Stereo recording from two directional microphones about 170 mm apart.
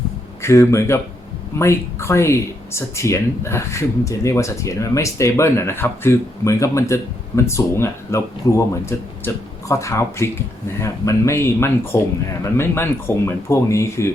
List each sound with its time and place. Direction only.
0.4 s speech: 15° left (ahead or behind)